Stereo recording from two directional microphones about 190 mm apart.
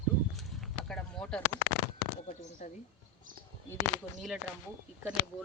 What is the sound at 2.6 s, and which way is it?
Speech, 40° left (ahead or behind).